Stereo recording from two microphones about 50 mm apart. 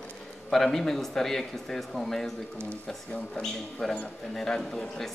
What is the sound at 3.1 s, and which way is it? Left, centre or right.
Speech, centre.